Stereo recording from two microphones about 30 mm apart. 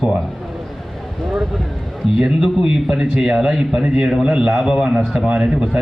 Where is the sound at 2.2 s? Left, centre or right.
Right.